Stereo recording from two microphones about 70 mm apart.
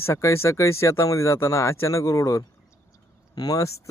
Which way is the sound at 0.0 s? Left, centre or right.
Left.